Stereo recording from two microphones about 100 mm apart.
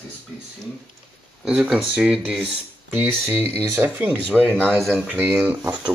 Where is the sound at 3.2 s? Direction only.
20° right (ahead or behind).